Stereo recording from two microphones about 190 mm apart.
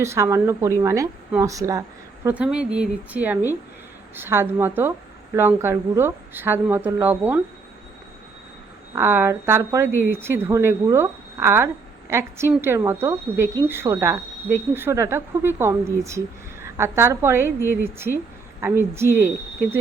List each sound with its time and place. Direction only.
0.0 s speech: 15° right (ahead or behind)
2.2 s speech: 5° right (ahead or behind)
9.0 s speech: 10° right (ahead or behind)
18.6 s speech: 15° right (ahead or behind)